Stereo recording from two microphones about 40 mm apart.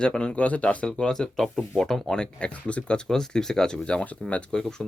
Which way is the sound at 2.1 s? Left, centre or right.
Left.